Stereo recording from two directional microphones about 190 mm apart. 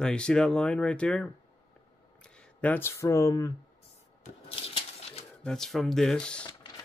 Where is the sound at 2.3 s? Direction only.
10° left (ahead or behind).